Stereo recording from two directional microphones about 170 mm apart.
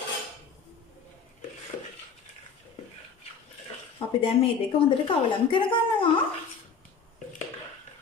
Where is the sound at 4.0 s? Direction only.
30° left (ahead or behind).